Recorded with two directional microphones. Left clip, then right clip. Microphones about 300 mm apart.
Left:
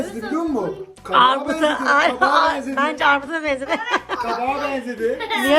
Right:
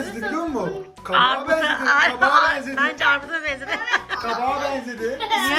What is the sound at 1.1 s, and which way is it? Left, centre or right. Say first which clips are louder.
A woman's voice: left 2 dB; centre.